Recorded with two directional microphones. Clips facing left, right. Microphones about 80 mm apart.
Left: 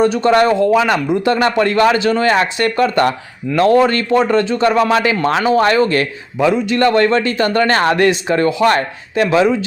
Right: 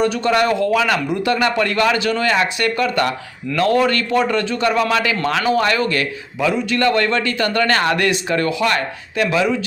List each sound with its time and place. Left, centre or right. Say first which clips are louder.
0.0 s a man's voice: left 5 dB; left